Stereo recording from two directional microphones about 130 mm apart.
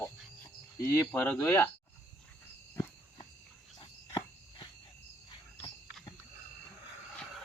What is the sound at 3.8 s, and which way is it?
Cricket, 35° left (ahead or behind).